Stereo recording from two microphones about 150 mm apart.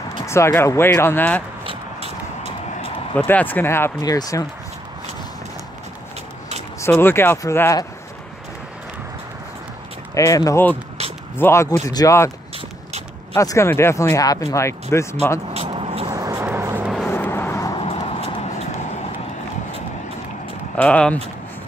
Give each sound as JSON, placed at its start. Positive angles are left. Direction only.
{"t": 0.3, "sound": "speech", "side_deg": 15}
{"t": 1.7, "sound": "a sound", "side_deg": -45}
{"t": 3.2, "sound": "speech", "side_deg": 10}
{"t": 6.8, "sound": "speech", "side_deg": 15}
{"t": 10.1, "sound": "speech", "side_deg": 20}
{"t": 13.3, "sound": "speech", "side_deg": 20}
{"t": 15.8, "sound": "vehicle", "side_deg": -40}
{"t": 16.2, "sound": "a sound", "side_deg": -20}
{"t": 16.8, "sound": "vehicle", "side_deg": 0}
{"t": 17.1, "sound": "vehicle", "side_deg": 15}
{"t": 17.7, "sound": "vehicle", "side_deg": 40}
{"t": 20.7, "sound": "speech", "side_deg": 10}